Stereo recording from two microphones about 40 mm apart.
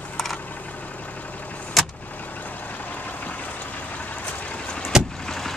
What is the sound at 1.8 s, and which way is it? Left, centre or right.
Vehicle, centre.